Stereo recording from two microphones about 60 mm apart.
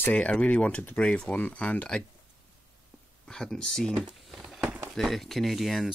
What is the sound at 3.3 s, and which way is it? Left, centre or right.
Speech, centre.